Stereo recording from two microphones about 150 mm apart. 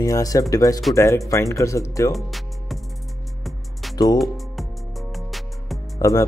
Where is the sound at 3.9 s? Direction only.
25° left (ahead or behind).